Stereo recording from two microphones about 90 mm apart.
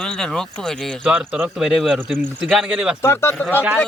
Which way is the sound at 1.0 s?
20° right (ahead or behind).